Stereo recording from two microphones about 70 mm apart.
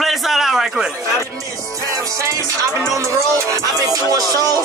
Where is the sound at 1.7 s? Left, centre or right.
Right.